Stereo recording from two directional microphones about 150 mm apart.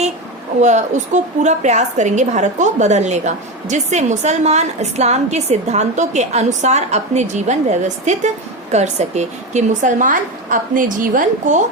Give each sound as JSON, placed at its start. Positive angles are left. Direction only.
{"t": 0.6, "sound": "a woman's voice", "side_deg": -50}